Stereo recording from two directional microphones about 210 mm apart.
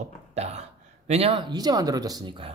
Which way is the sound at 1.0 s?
30° right (ahead or behind).